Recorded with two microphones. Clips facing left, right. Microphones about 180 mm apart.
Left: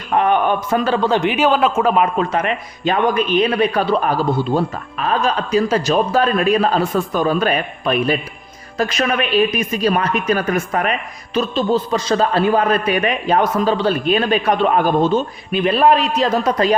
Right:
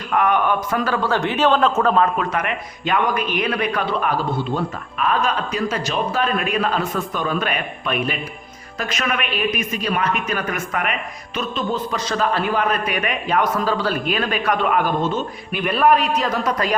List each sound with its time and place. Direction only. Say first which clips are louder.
0.1 s a man's voice: left 3 dB; 30° left (ahead or behind); by 2.0 s 10° left (ahead or behind)
2.1 s a man's voice: left 4 dB; 30° left (ahead or behind)